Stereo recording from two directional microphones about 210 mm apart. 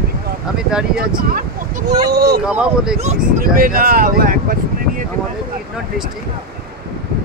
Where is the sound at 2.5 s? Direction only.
5° right (ahead or behind).